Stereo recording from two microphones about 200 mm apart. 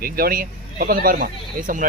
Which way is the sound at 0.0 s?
50° right (ahead or behind).